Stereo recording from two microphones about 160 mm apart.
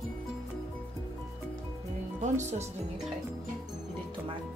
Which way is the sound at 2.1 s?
45° right (ahead or behind).